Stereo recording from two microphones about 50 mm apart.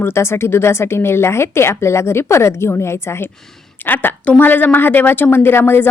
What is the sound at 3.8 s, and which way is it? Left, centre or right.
A woman's voice, left.